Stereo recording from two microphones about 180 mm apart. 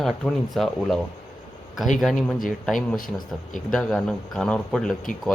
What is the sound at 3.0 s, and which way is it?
Speech, 50° left (ahead or behind).